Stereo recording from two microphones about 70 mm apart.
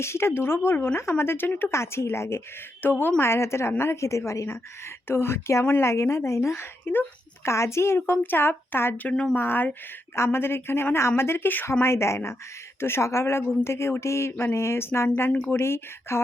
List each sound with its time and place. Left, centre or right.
0.0 s speech: left
1.7 s speech: left
2.8 s speech: left
3.2 s a woman's voice: left